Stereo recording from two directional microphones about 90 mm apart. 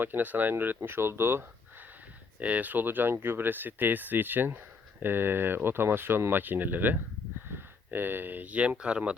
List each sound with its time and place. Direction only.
0.0 s speech: 20° right (ahead or behind)
2.4 s speech: 15° right (ahead or behind)